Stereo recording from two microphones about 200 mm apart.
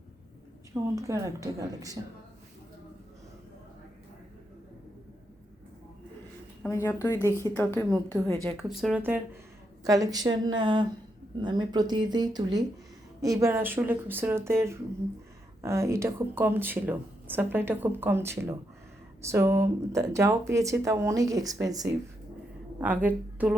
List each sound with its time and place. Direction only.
0.7 s speech: 15° right (ahead or behind)
6.7 s a woman's voice: 15° left (ahead or behind)
8.5 s speech: centre (ahead or behind)